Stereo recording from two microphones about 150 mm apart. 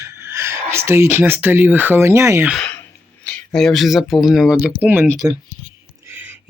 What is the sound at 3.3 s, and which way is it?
Speech, 5° left (ahead or behind).